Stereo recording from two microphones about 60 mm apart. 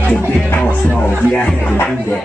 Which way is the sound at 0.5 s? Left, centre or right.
Left.